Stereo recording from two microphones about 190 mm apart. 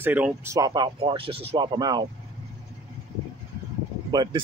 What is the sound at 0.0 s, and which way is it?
Speech, 10° right (ahead or behind).